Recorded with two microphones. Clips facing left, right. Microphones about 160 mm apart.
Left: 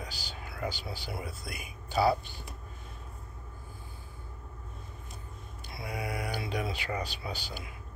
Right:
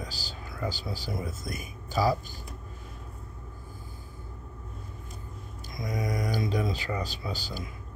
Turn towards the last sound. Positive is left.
turn(degrees=-35)  # may be behind; listen again after turning